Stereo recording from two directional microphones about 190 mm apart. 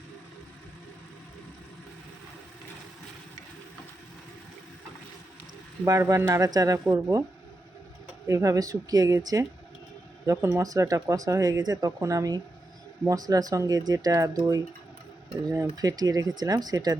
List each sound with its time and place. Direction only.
5.8 s speech: 15° right (ahead or behind)
8.3 s speech: 15° right (ahead or behind)